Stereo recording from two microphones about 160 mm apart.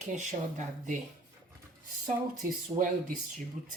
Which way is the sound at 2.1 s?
55° right (ahead or behind).